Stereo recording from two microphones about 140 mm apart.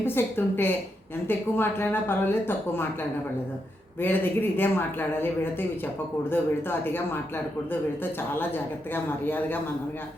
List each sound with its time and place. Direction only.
0.0 s a man's voice: 15° left (ahead or behind)
4.0 s a man's voice: 15° left (ahead or behind)